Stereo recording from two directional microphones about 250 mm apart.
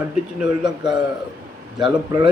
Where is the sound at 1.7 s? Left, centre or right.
Centre.